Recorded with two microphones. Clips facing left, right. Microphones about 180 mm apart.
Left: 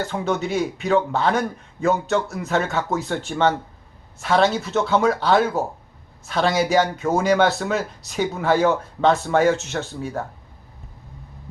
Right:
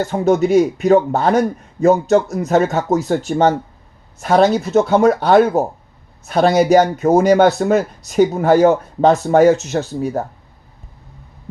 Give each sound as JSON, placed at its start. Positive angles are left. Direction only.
{"t": 0.0, "sound": "a man's voice", "side_deg": -45}